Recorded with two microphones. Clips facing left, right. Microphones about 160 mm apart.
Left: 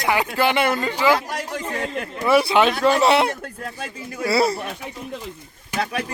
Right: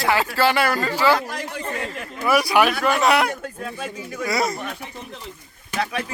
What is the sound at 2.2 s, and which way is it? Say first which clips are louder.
Speech: left 1 dB; 25° left (ahead or behind).